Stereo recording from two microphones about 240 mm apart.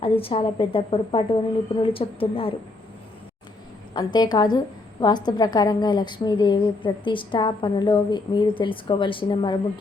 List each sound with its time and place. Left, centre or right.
0.0 s a woman's voice: left
3.9 s a woman's voice: centre